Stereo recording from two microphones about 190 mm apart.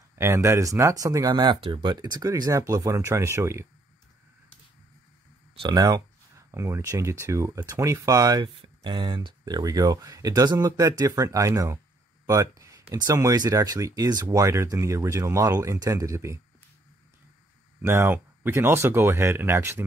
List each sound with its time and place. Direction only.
0.1 s speech: 15° right (ahead or behind)
5.6 s speech: 20° right (ahead or behind)
17.8 s speech: 15° right (ahead or behind)